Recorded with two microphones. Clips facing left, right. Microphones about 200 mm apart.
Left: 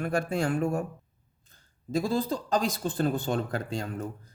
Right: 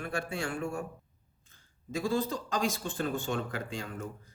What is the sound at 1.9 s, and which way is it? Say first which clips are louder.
Speech: left 3 dB; 35° left (ahead or behind).